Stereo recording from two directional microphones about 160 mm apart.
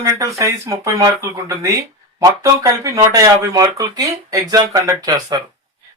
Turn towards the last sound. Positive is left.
turn(degrees=-25)  # may be behind; listen again after turning